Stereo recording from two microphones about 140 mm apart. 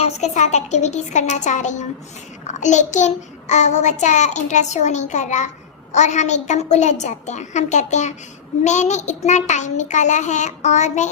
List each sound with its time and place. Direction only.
0.0 s child singing: 55° left (ahead or behind)